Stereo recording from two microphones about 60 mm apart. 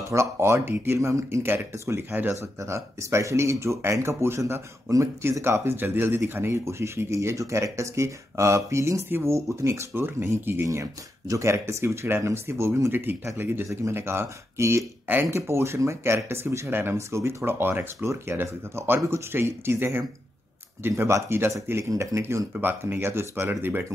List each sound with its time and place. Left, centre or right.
0.1 s speech: right
1.4 s speech: right
4.9 s speech: right
5.4 s speech: right
6.6 s speech: right
12.9 s speech: right
16.9 s speech: right
22.6 s speech: right